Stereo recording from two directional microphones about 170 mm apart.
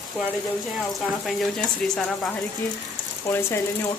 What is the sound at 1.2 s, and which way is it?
Speech, 5° left (ahead or behind).